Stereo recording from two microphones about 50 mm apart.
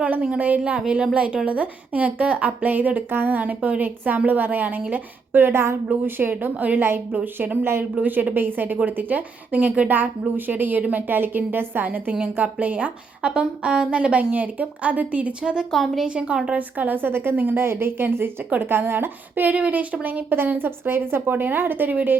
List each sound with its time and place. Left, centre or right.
0.0 s a woman's voice: right
6.1 s a woman's voice: right
6.3 s a woman's voice: right
9.9 s a woman's voice: right
13.3 s a woman's voice: centre
16.5 s a woman's voice: right
20.3 s a woman's voice: right